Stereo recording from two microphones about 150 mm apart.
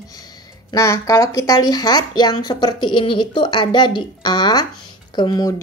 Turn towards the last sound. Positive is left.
turn(degrees=30)  # may be behind; listen again after turning